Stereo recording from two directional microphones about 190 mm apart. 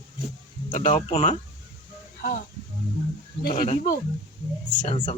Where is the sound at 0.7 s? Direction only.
40° left (ahead or behind).